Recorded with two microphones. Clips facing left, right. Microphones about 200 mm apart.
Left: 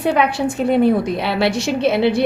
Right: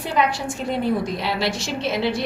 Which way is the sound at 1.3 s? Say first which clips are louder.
Left 7 dB; 60° left (ahead or behind).